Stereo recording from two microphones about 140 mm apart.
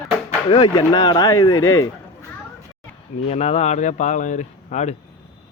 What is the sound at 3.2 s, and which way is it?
Speech, 50° left (ahead or behind).